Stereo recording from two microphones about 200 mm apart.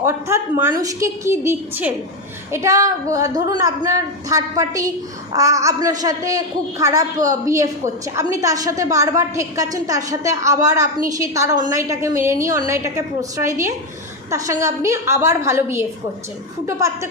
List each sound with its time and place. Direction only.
0.0 s a woman's voice: 15° right (ahead or behind)